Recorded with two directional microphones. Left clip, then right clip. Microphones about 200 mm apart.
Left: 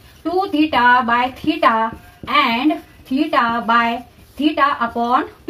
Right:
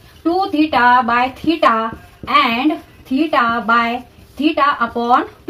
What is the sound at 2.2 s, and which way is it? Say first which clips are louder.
A woman's voice: right 2 dB; 10° left (ahead or behind).